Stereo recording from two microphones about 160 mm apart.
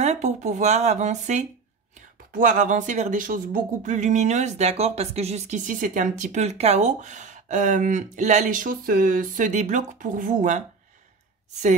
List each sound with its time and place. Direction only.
0.0 s speech: 45° right (ahead or behind)